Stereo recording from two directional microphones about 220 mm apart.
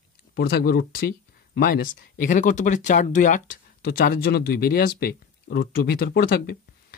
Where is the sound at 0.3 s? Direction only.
45° left (ahead or behind).